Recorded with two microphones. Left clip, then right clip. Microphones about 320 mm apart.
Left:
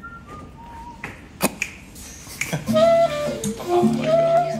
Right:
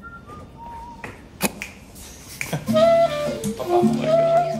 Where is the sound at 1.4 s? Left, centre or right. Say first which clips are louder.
Left 2 dB; centre.